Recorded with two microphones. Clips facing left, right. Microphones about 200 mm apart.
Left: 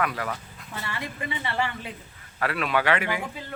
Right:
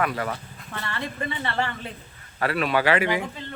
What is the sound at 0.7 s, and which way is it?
Speech, 15° left (ahead or behind).